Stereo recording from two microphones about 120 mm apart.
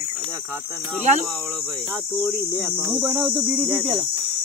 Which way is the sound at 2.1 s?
Centre (ahead or behind).